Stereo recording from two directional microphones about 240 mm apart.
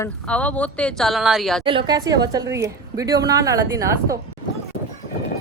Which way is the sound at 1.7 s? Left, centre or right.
Centre.